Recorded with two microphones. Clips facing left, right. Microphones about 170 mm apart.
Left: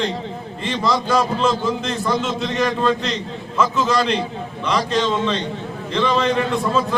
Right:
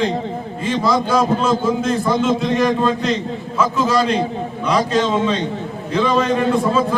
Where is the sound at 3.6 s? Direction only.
5° right (ahead or behind).